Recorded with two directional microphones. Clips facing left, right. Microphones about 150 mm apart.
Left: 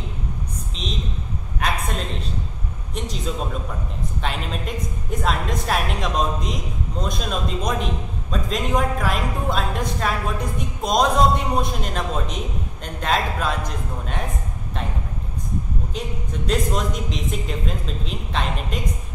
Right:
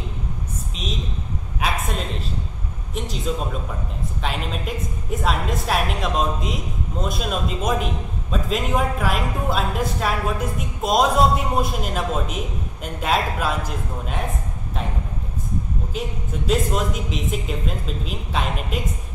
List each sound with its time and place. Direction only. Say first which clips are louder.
1.6 s a sound: even; centre (ahead or behind)
2.9 s a man's voice: right 1 dB; centre (ahead or behind)
4.2 s a woman's voice: right 1 dB; centre (ahead or behind)
15.9 s a woman's voice: right 3 dB; 5° right (ahead or behind)